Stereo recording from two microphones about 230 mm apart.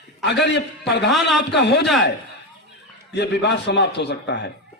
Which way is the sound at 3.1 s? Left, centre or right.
Left.